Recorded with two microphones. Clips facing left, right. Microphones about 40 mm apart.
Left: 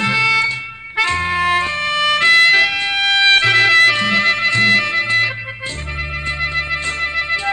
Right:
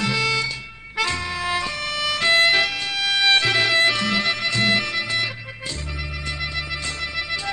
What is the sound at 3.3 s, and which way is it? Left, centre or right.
Music, left.